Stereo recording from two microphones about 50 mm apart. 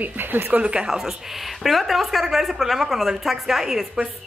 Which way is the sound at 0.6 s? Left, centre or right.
Centre.